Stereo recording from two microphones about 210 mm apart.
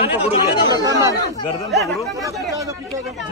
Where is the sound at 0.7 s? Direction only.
15° right (ahead or behind).